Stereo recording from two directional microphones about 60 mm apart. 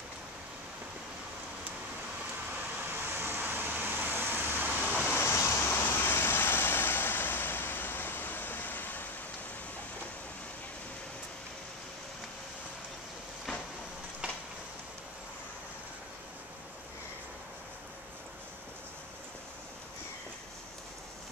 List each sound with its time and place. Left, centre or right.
2.5 s vehicle: right
5.2 s vehicle: left
14.2 s a sound: right